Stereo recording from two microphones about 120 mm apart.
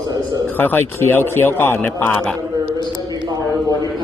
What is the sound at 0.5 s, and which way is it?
Speech, 15° left (ahead or behind).